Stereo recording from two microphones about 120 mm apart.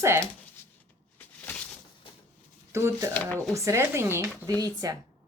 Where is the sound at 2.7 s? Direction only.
25° right (ahead or behind).